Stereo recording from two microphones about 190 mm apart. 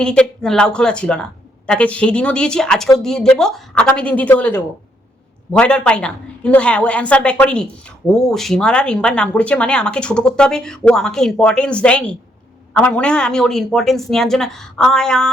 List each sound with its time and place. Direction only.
0.0 s a woman's voice: 5° left (ahead or behind)